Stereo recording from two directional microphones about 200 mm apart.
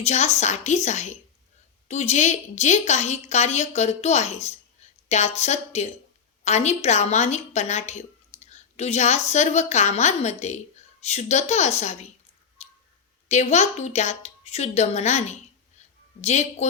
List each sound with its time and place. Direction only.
0.0 s a woman's voice: 35° left (ahead or behind)
12.6 s a sound: 35° left (ahead or behind)
13.2 s a woman's voice: 35° left (ahead or behind)